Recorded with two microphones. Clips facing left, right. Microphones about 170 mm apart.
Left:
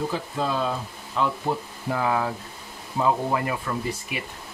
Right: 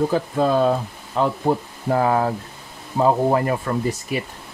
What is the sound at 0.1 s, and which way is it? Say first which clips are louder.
Speech: right 8 dB; 50° right (ahead or behind).